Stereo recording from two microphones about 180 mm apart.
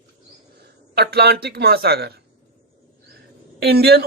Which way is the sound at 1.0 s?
65° right (ahead or behind).